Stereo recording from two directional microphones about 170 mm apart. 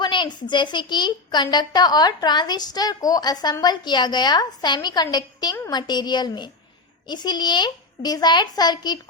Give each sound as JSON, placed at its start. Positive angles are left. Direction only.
{"t": 0.0, "sound": "a woman's voice", "side_deg": 25}